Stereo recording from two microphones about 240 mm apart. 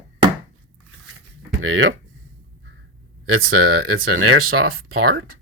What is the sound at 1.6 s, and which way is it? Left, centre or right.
Speech, right.